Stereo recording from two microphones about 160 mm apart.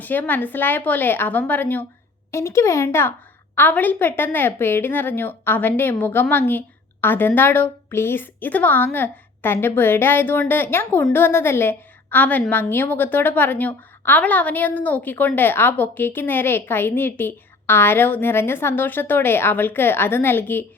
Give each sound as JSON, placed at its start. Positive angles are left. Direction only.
{"t": 0.0, "sound": "a woman's voice", "side_deg": 10}